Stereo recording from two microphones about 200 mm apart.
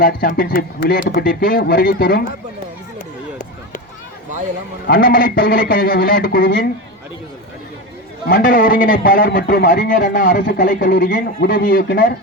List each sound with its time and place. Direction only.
0.0 s a man's voice: 45° left (ahead or behind)
4.9 s a man's voice: 45° left (ahead or behind)
8.3 s a man's voice: 45° left (ahead or behind)